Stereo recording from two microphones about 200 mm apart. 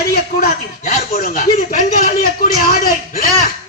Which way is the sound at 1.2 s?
45° left (ahead or behind).